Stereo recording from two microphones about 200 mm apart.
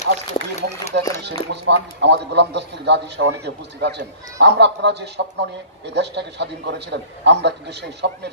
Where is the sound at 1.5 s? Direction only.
60° right (ahead or behind).